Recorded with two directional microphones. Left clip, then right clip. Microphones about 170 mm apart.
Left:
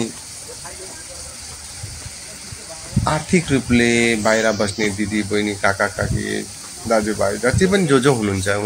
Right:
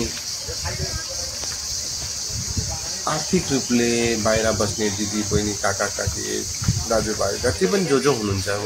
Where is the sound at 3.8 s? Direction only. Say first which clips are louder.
Left 5 dB; 10° left (ahead or behind).